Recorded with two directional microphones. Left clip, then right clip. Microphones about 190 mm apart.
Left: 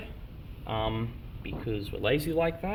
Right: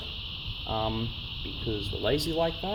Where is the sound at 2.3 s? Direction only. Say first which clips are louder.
Even; 40° right (ahead or behind).